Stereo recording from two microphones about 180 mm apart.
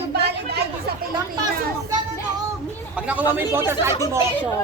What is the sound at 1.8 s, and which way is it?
Music, 20° right (ahead or behind).